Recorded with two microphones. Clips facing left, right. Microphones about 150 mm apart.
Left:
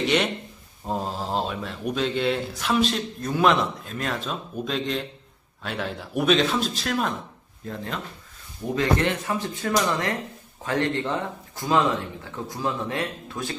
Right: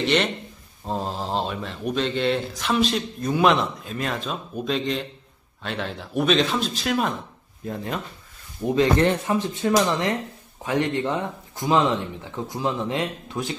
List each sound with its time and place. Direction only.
0.0 s speech: 5° left (ahead or behind)
7.6 s speech: 15° right (ahead or behind)
9.3 s speech: 20° right (ahead or behind)